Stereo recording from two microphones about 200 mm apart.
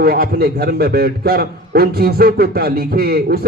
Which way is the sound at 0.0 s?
50° right (ahead or behind).